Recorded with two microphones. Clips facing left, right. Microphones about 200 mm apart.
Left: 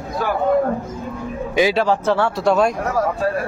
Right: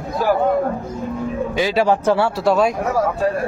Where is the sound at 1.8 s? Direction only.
15° right (ahead or behind).